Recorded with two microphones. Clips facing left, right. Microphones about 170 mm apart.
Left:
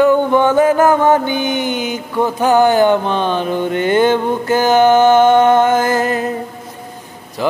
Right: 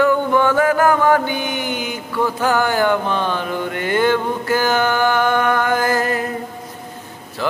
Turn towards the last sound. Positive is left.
turn(degrees=15)  # may be behind; listen again after turning